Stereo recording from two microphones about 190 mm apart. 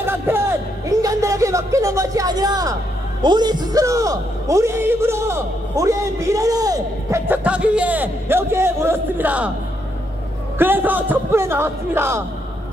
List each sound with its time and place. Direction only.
0.0 s a sound: 10° right (ahead or behind)
3.2 s a man's voice: 25° right (ahead or behind)
10.6 s a man's voice: 10° right (ahead or behind)